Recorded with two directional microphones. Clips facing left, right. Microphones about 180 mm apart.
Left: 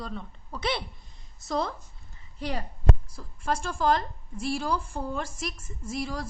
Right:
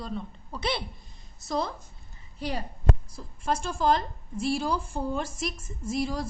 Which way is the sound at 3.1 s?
15° right (ahead or behind).